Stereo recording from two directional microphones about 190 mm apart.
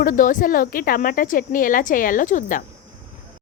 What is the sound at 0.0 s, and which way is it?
A woman's voice, 45° left (ahead or behind).